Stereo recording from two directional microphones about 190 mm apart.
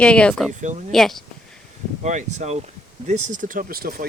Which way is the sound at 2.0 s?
35° right (ahead or behind).